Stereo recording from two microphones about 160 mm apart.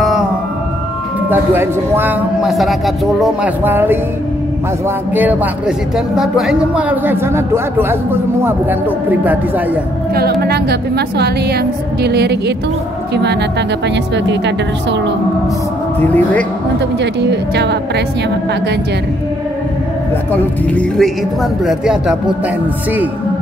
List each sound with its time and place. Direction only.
1.3 s a woman's voice: 15° right (ahead or behind)
2.5 s speech: centre (ahead or behind)
3.6 s a woman's voice: 15° right (ahead or behind)
10.1 s a woman's voice: 75° right (ahead or behind)
16.0 s speech: 10° left (ahead or behind)
17.0 s a woman's voice: 90° right
20.3 s speech: 5° left (ahead or behind)